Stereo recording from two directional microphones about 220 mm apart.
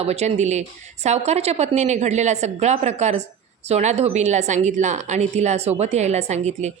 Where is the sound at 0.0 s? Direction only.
30° right (ahead or behind).